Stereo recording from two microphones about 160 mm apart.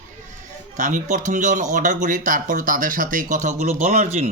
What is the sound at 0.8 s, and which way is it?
Speech, 50° right (ahead or behind).